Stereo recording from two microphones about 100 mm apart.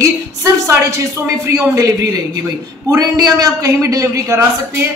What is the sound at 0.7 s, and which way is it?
Speech, 30° right (ahead or behind).